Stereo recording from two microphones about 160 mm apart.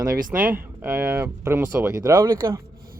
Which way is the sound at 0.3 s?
10° right (ahead or behind).